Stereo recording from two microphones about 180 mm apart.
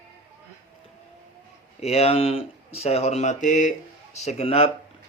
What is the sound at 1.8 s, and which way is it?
Speech, 35° left (ahead or behind).